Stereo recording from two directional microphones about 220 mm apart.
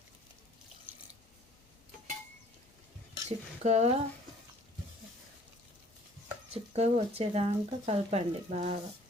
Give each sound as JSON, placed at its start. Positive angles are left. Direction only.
{"t": 3.2, "sound": "speech", "side_deg": -30}
{"t": 6.5, "sound": "speech", "side_deg": -30}